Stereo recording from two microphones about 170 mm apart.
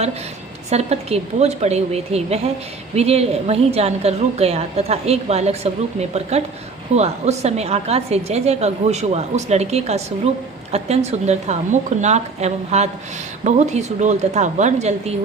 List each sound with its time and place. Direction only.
0.7 s a woman's voice: 40° right (ahead or behind)